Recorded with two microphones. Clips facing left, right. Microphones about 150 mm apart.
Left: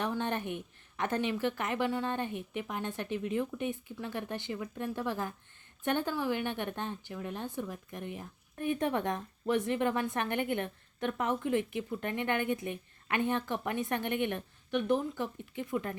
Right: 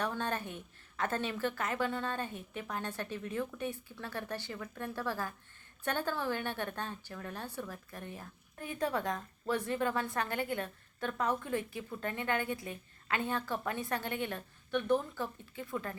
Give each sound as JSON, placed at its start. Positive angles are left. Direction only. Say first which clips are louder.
{"t": 0.0, "sound": "a woman's voice", "louder": "left 2 dB", "side_deg": 20}